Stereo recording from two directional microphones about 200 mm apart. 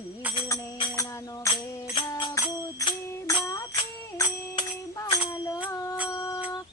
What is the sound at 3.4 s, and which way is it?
Music, 15° left (ahead or behind).